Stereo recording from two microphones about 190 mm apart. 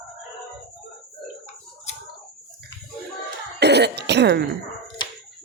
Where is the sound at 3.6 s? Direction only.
60° right (ahead or behind).